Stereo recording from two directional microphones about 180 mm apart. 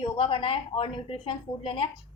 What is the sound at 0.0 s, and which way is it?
A woman's voice, 30° left (ahead or behind).